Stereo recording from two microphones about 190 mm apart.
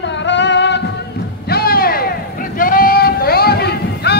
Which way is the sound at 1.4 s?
55° left (ahead or behind).